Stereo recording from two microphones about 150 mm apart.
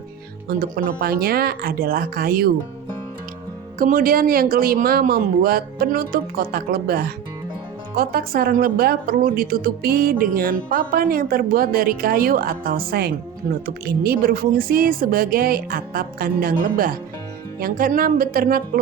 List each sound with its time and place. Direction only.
0.4 s speech: 85° right
3.8 s a woman's voice: 70° right (ahead or behind)